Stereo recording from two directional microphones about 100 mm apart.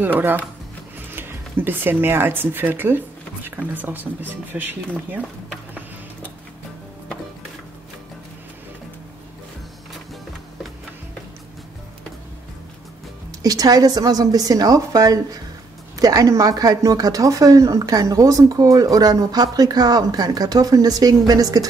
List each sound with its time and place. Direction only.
0.0 s speech: 20° right (ahead or behind)
13.4 s speech: 40° right (ahead or behind)